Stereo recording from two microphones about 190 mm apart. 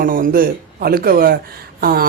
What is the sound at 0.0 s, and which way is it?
Speech, 50° right (ahead or behind).